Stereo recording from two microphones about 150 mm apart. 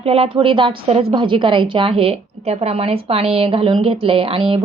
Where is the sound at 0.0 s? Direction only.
40° right (ahead or behind).